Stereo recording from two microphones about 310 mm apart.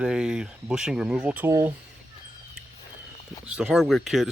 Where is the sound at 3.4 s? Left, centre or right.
Centre.